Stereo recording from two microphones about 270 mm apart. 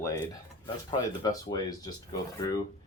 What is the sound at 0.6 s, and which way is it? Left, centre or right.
Speech, centre.